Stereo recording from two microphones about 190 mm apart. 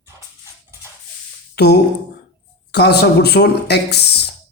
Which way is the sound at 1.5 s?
60° left (ahead or behind).